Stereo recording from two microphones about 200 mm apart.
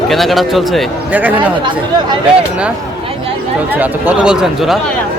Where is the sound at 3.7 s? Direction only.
10° right (ahead or behind).